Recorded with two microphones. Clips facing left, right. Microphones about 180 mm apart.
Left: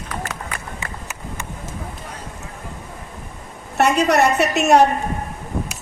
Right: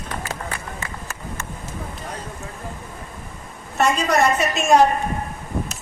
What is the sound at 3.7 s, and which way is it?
A woman's voice, 65° left (ahead or behind).